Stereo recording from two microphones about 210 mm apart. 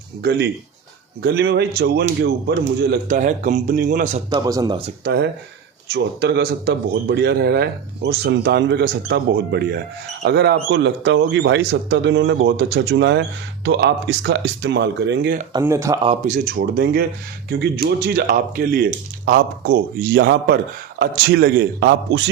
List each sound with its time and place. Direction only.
0.2 s a man's voice: 50° right (ahead or behind)
3.1 s speech: 35° right (ahead or behind)
4.3 s speech: 15° right (ahead or behind)
5.0 s a man's voice: 50° right (ahead or behind)
15.5 s speech: 15° right (ahead or behind)
16.0 s a man's voice: 35° right (ahead or behind)